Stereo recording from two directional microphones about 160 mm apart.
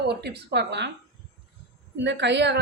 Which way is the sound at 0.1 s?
90° right.